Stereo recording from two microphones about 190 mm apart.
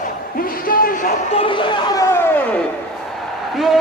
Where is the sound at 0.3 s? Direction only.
50° left (ahead or behind).